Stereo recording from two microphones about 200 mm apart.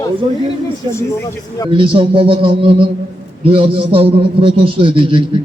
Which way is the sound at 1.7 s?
25° right (ahead or behind).